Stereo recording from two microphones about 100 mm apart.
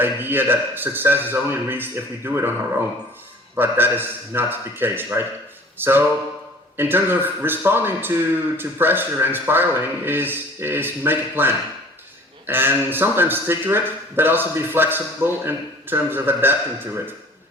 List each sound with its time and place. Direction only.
0.0 s a man's voice: 20° right (ahead or behind)
3.5 s a man's voice: 20° right (ahead or behind)
5.7 s a sound: 20° right (ahead or behind)
6.7 s a man's voice: 20° right (ahead or behind)